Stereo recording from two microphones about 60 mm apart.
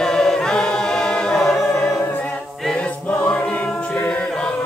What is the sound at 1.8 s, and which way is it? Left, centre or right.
Choir, left.